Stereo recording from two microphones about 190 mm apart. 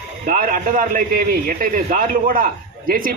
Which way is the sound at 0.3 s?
45° right (ahead or behind).